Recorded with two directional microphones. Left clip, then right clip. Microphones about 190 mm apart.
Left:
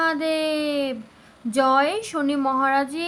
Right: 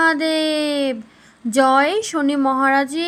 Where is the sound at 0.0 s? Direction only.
25° right (ahead or behind).